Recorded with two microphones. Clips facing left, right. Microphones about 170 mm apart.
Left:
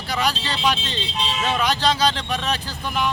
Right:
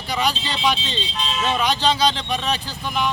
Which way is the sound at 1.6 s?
10° left (ahead or behind).